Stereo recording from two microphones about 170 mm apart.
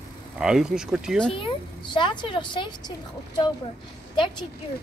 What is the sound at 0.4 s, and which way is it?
Speech, 5° right (ahead or behind).